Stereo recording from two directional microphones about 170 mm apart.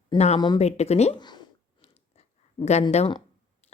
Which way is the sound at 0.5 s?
40° left (ahead or behind).